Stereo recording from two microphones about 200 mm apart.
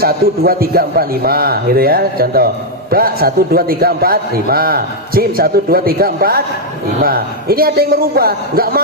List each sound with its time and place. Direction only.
0.0 s a man's voice: 50° right (ahead or behind)